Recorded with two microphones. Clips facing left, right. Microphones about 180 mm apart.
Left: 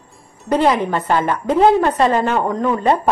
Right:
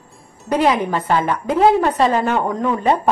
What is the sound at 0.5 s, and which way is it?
A woman's voice, 5° right (ahead or behind).